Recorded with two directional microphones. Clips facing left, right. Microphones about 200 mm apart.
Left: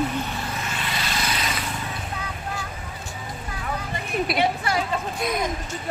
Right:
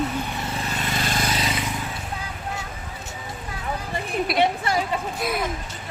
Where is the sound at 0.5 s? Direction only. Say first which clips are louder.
Right 3 dB; 35° right (ahead or behind).